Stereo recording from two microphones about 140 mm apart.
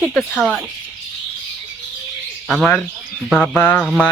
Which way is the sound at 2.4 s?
5° left (ahead or behind).